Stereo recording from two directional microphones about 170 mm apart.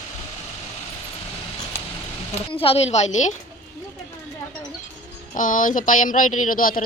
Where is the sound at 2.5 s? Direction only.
35° left (ahead or behind).